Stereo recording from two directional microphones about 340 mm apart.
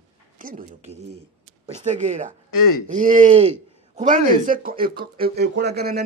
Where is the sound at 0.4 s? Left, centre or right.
Right.